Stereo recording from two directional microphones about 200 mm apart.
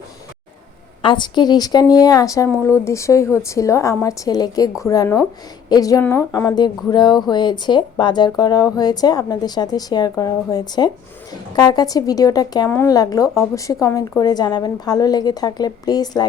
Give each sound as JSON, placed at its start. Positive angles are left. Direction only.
{"t": 1.0, "sound": "speech", "side_deg": 25}